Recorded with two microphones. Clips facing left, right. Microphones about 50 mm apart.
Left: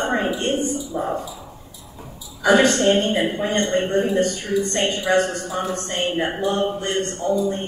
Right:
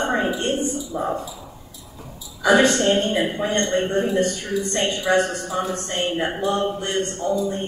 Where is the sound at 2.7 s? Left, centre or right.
Left; by 4.1 s centre.